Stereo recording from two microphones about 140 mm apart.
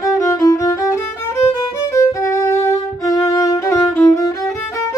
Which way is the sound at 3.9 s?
10° left (ahead or behind).